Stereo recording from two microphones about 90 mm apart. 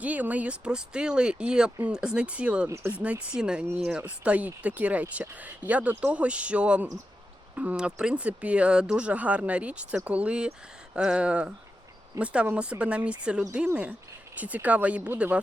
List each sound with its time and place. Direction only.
0.0 s speech: 15° right (ahead or behind)
2.6 s speech: 30° right (ahead or behind)
2.9 s speech: 15° right (ahead or behind)